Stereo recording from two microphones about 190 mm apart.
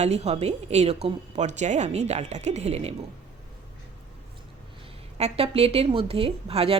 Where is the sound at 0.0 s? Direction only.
35° right (ahead or behind).